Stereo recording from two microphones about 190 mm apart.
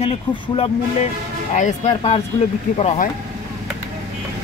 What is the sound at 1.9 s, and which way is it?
Speech, 35° left (ahead or behind).